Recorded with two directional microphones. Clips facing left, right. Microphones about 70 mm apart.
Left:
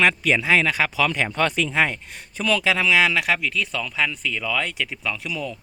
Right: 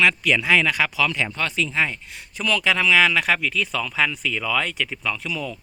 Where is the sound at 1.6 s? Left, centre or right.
Left.